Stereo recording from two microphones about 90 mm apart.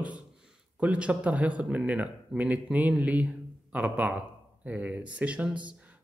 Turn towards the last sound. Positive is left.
turn(degrees=-15)  # may be behind; listen again after turning